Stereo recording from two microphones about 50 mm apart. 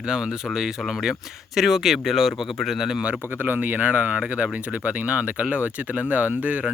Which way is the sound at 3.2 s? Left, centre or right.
Right.